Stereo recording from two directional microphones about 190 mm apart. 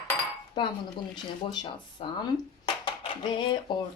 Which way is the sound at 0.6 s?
25° left (ahead or behind).